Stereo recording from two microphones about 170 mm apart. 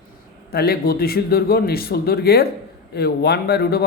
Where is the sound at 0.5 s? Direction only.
65° left (ahead or behind).